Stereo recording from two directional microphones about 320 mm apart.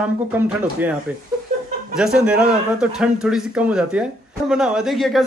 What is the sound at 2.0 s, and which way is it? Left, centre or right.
Speech, centre.